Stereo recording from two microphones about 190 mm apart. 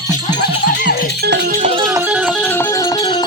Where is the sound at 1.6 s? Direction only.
35° right (ahead or behind).